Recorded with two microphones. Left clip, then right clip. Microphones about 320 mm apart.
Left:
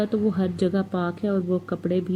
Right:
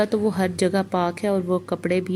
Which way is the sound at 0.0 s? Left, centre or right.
Right.